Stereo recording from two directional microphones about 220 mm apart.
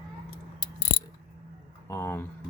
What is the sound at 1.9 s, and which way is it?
Speech, 10° left (ahead or behind).